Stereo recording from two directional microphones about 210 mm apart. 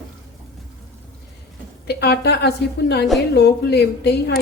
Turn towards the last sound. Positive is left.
turn(degrees=50)  # may be behind; listen again after turning